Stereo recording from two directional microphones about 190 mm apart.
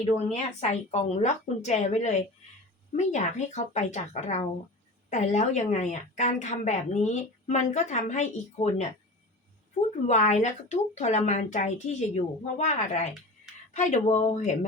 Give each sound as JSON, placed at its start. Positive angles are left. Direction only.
{"t": 0.6, "sound": "a woman's voice", "side_deg": 35}
{"t": 10.1, "sound": "a woman's voice", "side_deg": 40}